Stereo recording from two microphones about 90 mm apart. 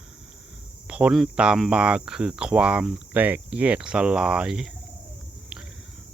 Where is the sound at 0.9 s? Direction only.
10° right (ahead or behind).